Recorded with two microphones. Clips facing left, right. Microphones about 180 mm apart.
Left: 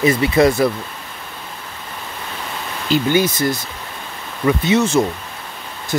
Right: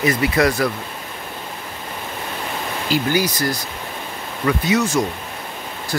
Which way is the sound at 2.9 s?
25° left (ahead or behind).